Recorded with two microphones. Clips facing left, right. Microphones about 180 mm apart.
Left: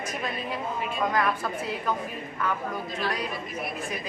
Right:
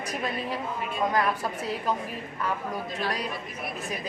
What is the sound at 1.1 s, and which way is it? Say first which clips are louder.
Speech: even; 35° right (ahead or behind).